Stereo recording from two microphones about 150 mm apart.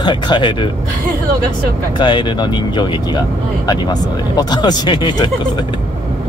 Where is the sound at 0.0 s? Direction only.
30° left (ahead or behind).